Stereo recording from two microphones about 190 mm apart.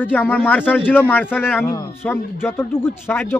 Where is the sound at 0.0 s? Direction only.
10° left (ahead or behind).